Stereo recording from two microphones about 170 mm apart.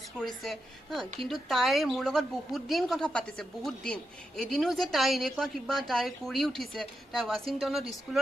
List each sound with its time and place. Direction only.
0.2 s a woman's voice: centre (ahead or behind)